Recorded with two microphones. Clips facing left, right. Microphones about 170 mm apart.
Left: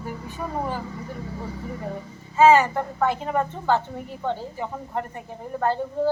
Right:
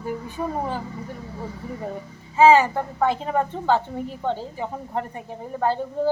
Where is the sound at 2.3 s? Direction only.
10° right (ahead or behind).